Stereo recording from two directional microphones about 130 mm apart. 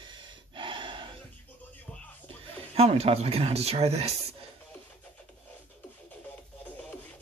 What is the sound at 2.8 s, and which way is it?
Speech, 55° right (ahead or behind).